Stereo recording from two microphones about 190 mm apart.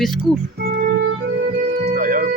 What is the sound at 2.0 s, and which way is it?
Music, 45° right (ahead or behind).